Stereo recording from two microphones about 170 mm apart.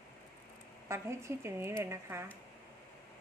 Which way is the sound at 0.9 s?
15° right (ahead or behind).